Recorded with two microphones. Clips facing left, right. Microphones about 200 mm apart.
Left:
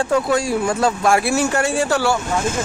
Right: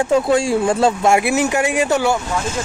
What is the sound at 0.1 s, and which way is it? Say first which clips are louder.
Speech: right 4 dB; 25° right (ahead or behind).